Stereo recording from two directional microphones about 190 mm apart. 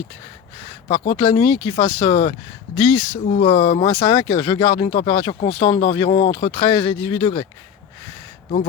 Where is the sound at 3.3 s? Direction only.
35° left (ahead or behind).